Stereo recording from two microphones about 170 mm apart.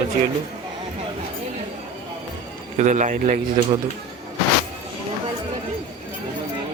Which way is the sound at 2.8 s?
45° right (ahead or behind).